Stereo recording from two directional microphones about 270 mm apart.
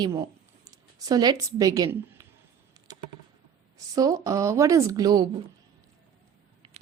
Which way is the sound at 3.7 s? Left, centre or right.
Centre.